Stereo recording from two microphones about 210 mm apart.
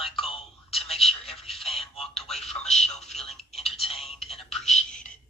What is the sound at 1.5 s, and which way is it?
Telephone, centre (ahead or behind).